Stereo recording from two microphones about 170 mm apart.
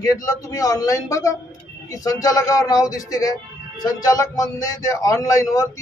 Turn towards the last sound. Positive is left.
turn(degrees=20)  # may be behind; listen again after turning